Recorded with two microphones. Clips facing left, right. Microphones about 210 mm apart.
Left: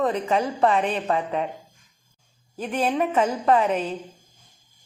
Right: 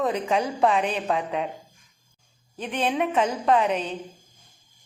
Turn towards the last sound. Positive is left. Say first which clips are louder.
# left 1 dB
turn(degrees=5)  # may be behind; listen again after turning